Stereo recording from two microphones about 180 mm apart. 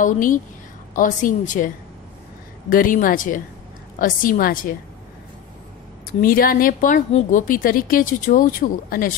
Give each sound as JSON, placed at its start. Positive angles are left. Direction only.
{"t": 0.0, "sound": "a woman's voice", "side_deg": 45}
{"t": 2.7, "sound": "a woman's voice", "side_deg": 50}
{"t": 6.2, "sound": "a woman's voice", "side_deg": 55}